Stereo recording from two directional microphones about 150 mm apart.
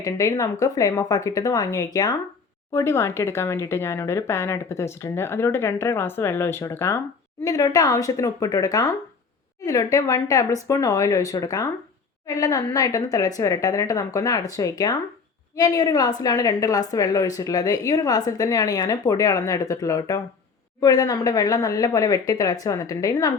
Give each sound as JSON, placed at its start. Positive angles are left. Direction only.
{"t": 0.0, "sound": "a woman's voice", "side_deg": 25}